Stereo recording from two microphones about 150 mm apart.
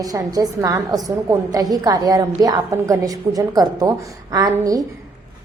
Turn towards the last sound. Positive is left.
turn(degrees=-25)  # may be behind; listen again after turning